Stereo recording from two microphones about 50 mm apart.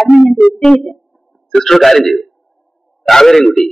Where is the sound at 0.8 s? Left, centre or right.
Centre.